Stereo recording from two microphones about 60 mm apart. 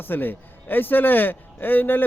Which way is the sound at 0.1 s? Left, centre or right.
Left.